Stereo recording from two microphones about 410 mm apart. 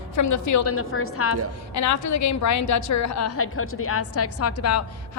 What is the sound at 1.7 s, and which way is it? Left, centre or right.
A woman's voice, left.